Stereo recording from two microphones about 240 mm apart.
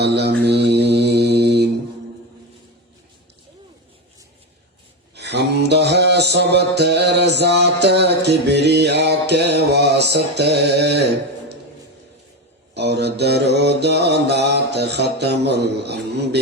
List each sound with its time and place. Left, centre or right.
0.0 s mantra: right
5.1 s mantra: right
12.7 s mantra: right